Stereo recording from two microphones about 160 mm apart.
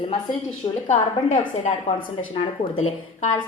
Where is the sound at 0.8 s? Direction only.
50° left (ahead or behind).